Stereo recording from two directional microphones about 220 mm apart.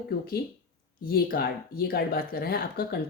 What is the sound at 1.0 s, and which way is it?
Speech, 45° left (ahead or behind).